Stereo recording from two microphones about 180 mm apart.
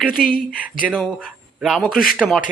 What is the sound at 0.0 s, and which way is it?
Speech, centre (ahead or behind).